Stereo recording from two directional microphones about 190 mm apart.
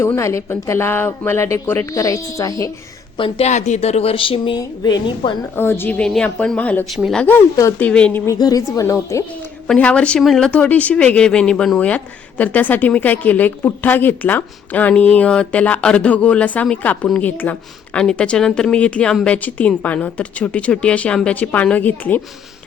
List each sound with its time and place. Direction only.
0.0 s a woman's voice: 15° left (ahead or behind)
3.2 s speech: 30° left (ahead or behind)
5.5 s a woman's voice: 10° left (ahead or behind)
8.4 s a woman's voice: 20° left (ahead or behind)
9.6 s a woman's voice: 5° left (ahead or behind)